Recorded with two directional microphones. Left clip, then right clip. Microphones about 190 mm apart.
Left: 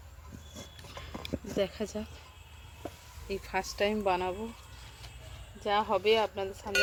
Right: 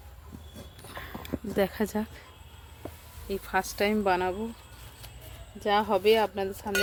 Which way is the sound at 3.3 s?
15° right (ahead or behind).